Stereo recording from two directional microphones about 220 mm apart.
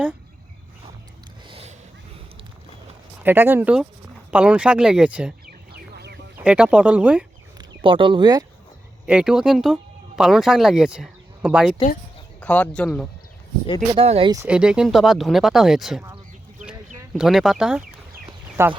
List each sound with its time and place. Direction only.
1.5 s a sound: 25° right (ahead or behind)
3.2 s speech: 10° right (ahead or behind)
5.5 s a sound: 45° right (ahead or behind)
6.4 s speech: 5° right (ahead or behind)
7.6 s speech: 25° right (ahead or behind)
9.0 s speech: 5° right (ahead or behind)
13.9 s speech: 25° right (ahead or behind)
14.4 s speech: 5° right (ahead or behind)
17.2 s speech: centre (ahead or behind)
18.3 s a sound: 10° right (ahead or behind)